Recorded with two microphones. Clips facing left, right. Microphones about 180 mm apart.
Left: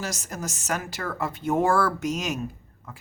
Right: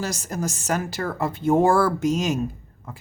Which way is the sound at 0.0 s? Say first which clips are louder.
Right 5 dB; 30° right (ahead or behind).